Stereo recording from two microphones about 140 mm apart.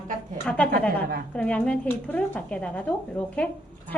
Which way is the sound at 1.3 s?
10° left (ahead or behind).